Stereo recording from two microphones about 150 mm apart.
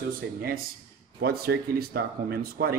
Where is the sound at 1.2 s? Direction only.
90° right.